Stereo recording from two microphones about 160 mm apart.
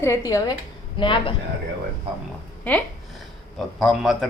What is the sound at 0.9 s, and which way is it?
Speech, 30° left (ahead or behind).